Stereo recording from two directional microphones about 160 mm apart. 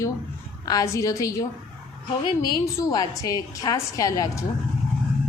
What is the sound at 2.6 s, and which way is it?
A woman's voice, 20° left (ahead or behind).